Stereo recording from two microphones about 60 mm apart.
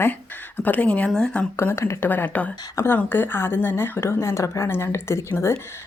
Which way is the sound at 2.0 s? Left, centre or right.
Left.